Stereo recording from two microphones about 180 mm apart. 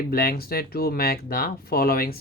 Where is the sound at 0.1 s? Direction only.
55° left (ahead or behind).